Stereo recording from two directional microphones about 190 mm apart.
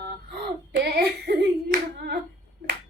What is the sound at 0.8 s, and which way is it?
Child singing, 55° right (ahead or behind).